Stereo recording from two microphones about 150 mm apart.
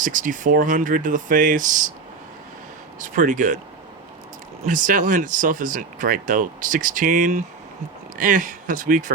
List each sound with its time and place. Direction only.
0.0 s speech: 60° right (ahead or behind)
3.0 s speech: 60° right (ahead or behind)
4.6 s speech: 60° right (ahead or behind)